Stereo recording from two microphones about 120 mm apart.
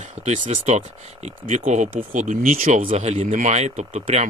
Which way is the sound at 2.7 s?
80° right.